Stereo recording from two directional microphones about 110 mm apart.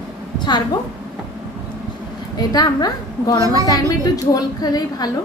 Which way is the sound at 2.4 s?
35° left (ahead or behind).